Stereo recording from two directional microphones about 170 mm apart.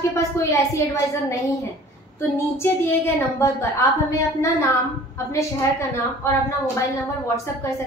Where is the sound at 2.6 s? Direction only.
15° left (ahead or behind).